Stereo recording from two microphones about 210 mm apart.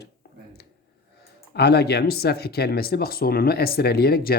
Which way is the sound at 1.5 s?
50° left (ahead or behind).